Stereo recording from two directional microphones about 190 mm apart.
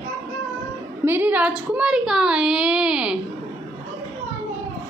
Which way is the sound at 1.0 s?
10° right (ahead or behind).